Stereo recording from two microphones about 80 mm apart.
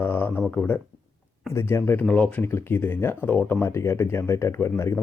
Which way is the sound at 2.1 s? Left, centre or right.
Left.